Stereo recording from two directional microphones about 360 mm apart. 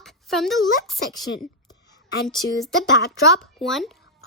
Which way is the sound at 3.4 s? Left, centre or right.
Centre.